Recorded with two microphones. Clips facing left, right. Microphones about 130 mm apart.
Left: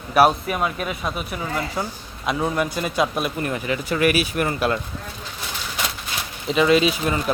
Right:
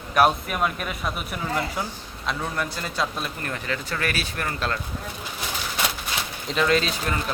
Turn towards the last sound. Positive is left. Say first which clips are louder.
# left 5 dB
turn(degrees=10)  # may be behind; listen again after turning